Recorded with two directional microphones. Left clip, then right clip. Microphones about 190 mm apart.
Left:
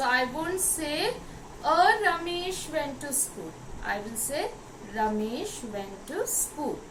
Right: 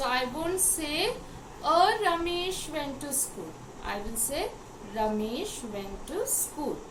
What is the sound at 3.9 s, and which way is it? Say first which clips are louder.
A woman's voice: left 2 dB; 15° right (ahead or behind).